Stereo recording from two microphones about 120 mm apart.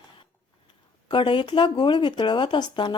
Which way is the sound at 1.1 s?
45° left (ahead or behind).